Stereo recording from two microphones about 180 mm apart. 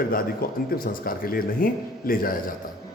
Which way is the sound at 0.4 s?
55° left (ahead or behind).